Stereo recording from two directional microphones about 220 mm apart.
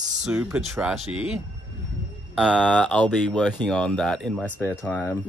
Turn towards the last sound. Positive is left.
turn(degrees=5)  # may be behind; listen again after turning